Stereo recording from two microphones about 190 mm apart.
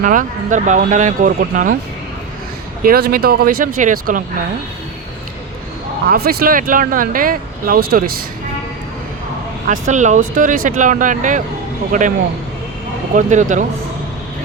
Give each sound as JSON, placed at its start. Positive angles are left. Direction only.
{"t": 0.0, "sound": "speech", "side_deg": -45}
{"t": 2.8, "sound": "speech", "side_deg": -50}
{"t": 6.1, "sound": "speech", "side_deg": -50}
{"t": 9.6, "sound": "speech", "side_deg": -40}
{"t": 13.1, "sound": "speech", "side_deg": -40}